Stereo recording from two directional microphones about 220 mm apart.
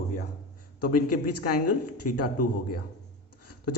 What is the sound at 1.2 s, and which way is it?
Speech, 90° left.